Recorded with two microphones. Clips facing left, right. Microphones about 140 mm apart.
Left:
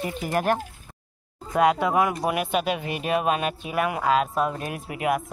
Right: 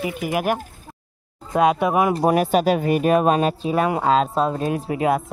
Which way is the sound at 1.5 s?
20° right (ahead or behind).